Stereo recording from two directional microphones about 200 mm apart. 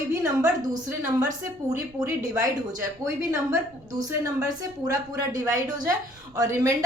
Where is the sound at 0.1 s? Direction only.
15° right (ahead or behind).